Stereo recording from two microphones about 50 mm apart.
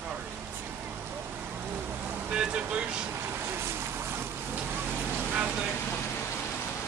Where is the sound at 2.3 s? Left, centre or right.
Right.